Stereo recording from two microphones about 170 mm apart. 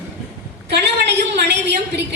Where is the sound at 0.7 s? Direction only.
90° right.